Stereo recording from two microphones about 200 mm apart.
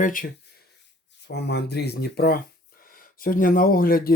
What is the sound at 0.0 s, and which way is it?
Speech, 40° left (ahead or behind).